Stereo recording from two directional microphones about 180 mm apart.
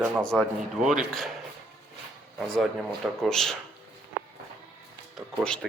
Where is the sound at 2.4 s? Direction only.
Centre (ahead or behind).